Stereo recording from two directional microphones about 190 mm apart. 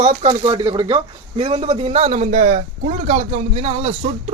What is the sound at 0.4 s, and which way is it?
A man's voice, 25° right (ahead or behind).